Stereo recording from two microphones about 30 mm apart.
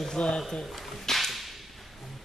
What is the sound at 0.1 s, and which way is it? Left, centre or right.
Speech, left.